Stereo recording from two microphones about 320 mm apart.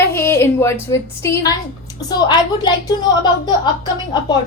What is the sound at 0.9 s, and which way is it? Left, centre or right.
A woman's voice, centre.